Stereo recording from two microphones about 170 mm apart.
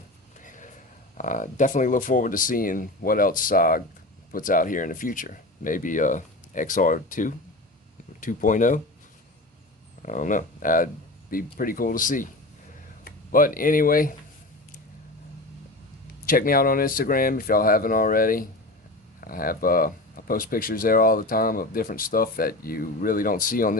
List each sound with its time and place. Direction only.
0.3 s a sound: 50° left (ahead or behind)
1.1 s speech: 50° left (ahead or behind)
10.0 s speech: 50° left (ahead or behind)
16.2 s speech: 55° left (ahead or behind)